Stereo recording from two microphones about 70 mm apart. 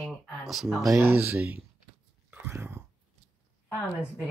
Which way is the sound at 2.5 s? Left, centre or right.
Right.